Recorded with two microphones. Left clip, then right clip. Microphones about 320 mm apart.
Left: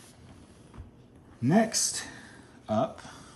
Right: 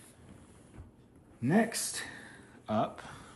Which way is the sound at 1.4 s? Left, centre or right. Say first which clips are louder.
Left 5 dB; centre.